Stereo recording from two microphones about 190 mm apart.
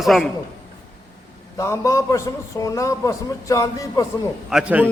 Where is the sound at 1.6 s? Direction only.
15° left (ahead or behind).